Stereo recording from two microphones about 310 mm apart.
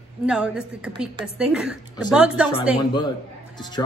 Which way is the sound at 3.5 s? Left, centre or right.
Centre.